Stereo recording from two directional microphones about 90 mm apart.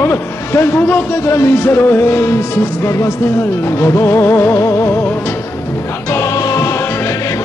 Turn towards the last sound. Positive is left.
turn(degrees=35)  # may be behind; listen again after turning